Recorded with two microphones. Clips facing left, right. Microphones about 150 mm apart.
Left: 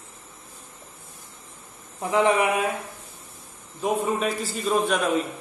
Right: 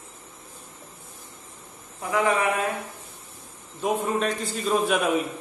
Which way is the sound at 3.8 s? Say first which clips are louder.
Even; centre (ahead or behind).